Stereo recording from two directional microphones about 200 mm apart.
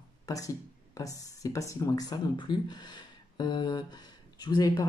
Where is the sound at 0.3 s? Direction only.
20° left (ahead or behind).